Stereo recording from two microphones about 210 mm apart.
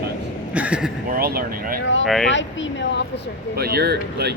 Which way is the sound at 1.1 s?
45° right (ahead or behind).